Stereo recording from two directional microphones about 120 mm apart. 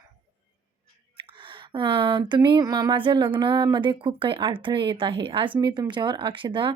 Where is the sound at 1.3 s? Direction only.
45° right (ahead or behind).